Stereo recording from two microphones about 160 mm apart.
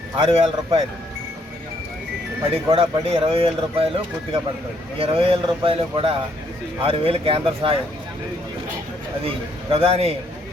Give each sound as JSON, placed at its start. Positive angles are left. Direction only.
{"t": 0.3, "sound": "speech", "side_deg": -35}
{"t": 2.4, "sound": "speech", "side_deg": -35}
{"t": 4.9, "sound": "speech", "side_deg": -35}
{"t": 9.2, "sound": "speech", "side_deg": -35}